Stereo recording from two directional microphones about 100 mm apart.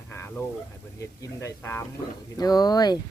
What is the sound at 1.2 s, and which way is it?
Speech, 30° left (ahead or behind).